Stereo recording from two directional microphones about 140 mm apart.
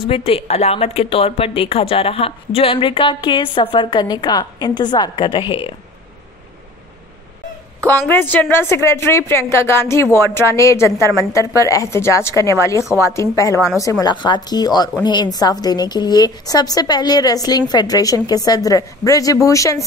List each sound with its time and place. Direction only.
0.1 s a woman's voice: 45° left (ahead or behind)
8.1 s a woman's voice: 10° left (ahead or behind)